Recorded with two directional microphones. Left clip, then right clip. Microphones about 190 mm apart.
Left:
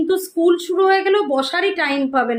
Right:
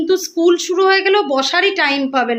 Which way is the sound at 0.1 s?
10° right (ahead or behind).